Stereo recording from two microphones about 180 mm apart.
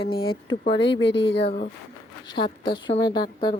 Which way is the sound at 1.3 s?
30° left (ahead or behind).